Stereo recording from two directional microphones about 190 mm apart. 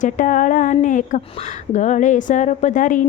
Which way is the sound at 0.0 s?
45° left (ahead or behind).